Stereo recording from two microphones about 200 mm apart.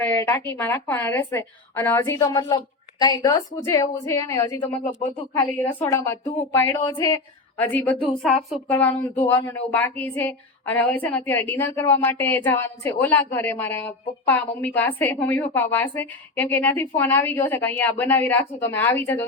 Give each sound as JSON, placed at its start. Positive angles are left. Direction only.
{"t": 0.0, "sound": "a woman's voice", "side_deg": 10}
{"t": 5.8, "sound": "a woman's voice", "side_deg": 15}
{"t": 6.7, "sound": "a woman's voice", "side_deg": 25}
{"t": 7.6, "sound": "a woman's voice", "side_deg": 10}